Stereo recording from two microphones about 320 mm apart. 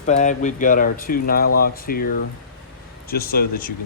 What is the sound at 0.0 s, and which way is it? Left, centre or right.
Speech, left.